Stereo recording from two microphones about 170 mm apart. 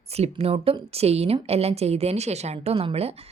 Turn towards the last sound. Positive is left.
turn(degrees=-35)  # may be behind; listen again after turning